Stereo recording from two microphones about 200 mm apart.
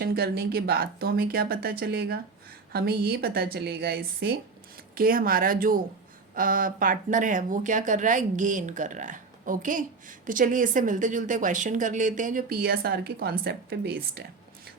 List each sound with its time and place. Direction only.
0.0 s speech: 50° right (ahead or behind)